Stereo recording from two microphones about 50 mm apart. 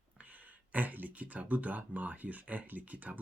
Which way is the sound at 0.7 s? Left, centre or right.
Right.